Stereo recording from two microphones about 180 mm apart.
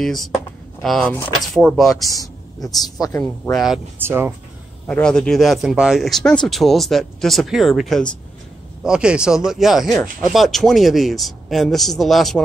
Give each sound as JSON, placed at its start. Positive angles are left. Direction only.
{"t": 0.0, "sound": "speech", "side_deg": 0}
{"t": 2.1, "sound": "speech", "side_deg": 20}
{"t": 3.5, "sound": "speech", "side_deg": 0}
{"t": 4.0, "sound": "speech", "side_deg": -10}
{"t": 4.8, "sound": "speech", "side_deg": 5}